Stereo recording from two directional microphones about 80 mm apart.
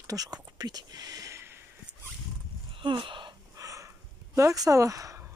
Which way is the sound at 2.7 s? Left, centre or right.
Right.